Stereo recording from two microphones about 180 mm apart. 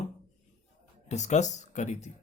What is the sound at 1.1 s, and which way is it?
A man's voice, 40° left (ahead or behind).